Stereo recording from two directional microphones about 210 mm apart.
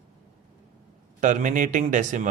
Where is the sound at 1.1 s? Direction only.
40° right (ahead or behind).